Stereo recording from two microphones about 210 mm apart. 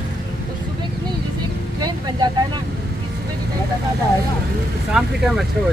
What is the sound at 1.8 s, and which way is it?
Vehicle, 20° right (ahead or behind).